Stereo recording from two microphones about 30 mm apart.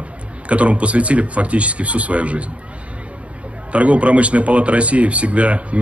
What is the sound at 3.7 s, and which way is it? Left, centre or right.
Speech, right.